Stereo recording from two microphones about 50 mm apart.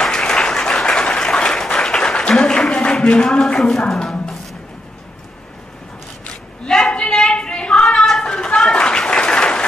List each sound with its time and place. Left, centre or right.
0.0 s applause: centre
3.3 s speech: centre
4.0 s music: centre
6.6 s a sound: centre